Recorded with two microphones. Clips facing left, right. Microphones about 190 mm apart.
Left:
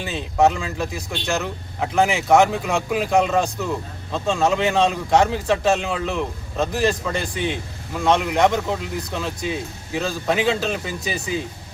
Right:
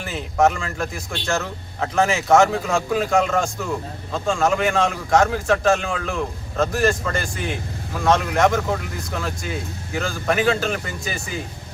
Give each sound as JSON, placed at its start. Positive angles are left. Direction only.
{"t": 0.0, "sound": "speech", "side_deg": 20}